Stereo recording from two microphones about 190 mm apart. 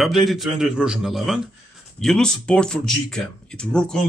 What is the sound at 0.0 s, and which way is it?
Speech, centre (ahead or behind).